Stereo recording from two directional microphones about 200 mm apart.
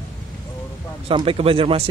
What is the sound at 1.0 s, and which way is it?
Speech, 25° right (ahead or behind).